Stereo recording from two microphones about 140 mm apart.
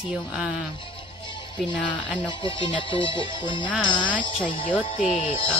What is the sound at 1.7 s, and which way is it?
Speech, 10° left (ahead or behind).